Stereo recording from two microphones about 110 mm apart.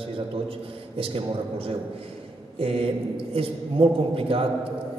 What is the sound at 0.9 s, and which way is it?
Speech, 55° right (ahead or behind).